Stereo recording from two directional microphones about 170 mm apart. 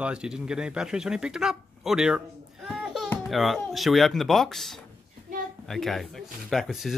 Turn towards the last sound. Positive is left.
turn(degrees=0)  # may be behind; listen again after turning